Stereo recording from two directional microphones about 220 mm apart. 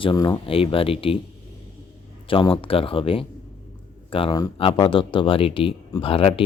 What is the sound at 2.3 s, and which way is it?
Speech, 25° left (ahead or behind).